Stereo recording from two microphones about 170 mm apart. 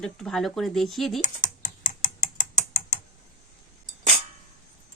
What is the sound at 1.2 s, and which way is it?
Computer keyboard, 50° left (ahead or behind).